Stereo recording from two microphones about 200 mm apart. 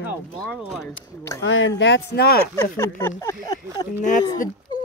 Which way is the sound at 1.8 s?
60° left (ahead or behind).